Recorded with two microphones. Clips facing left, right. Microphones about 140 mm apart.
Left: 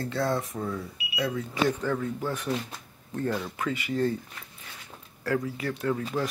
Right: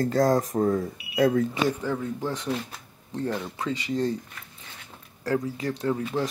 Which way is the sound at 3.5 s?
30° right (ahead or behind).